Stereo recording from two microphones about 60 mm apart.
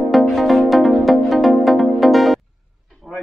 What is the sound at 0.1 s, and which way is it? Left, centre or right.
Music, centre.